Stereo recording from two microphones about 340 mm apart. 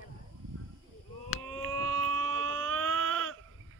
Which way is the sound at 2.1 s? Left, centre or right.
Right.